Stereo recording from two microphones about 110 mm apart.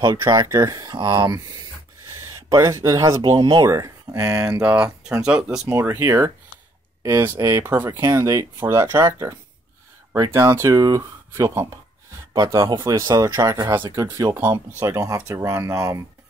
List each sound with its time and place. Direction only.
0.0 s speech: 30° right (ahead or behind)
2.5 s speech: 30° right (ahead or behind); by 5.6 s 10° right (ahead or behind)
5.7 s speech: 25° right (ahead or behind)
10.3 s speech: 25° right (ahead or behind)